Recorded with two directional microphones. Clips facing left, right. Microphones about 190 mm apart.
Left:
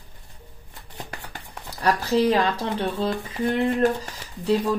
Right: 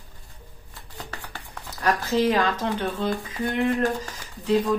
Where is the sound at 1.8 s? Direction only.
35° left (ahead or behind).